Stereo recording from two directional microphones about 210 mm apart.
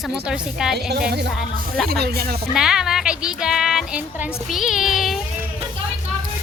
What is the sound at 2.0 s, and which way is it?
Speech, 45° right (ahead or behind).